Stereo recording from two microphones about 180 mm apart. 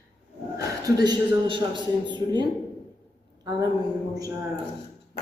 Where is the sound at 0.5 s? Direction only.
20° right (ahead or behind).